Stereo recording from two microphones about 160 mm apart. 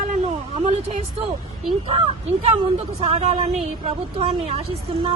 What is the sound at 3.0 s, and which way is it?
Speech, 40° right (ahead or behind).